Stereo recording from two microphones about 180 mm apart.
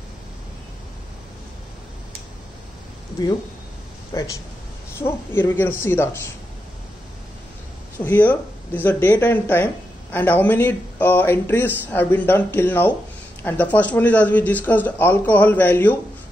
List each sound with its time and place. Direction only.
4.1 s speech: 15° left (ahead or behind)
8.0 s speech: 10° left (ahead or behind)